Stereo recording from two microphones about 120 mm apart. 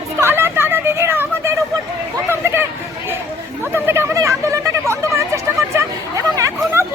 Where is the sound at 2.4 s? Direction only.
20° right (ahead or behind).